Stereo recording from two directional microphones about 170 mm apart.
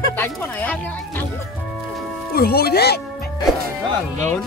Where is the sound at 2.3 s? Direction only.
65° left (ahead or behind).